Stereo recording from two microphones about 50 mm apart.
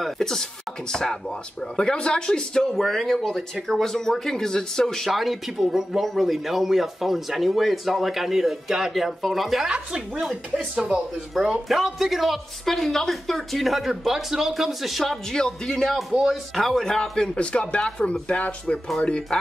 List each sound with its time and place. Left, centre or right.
0.0 s speech: centre
1.8 s speech: centre
9.7 s speech: right
10.2 s speech: centre
15.3 s speech: centre
16.0 s speech: centre
16.5 s speech: centre
17.4 s speech: left